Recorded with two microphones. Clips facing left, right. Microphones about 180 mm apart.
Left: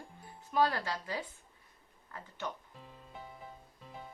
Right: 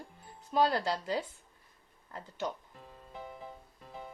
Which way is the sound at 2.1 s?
25° right (ahead or behind).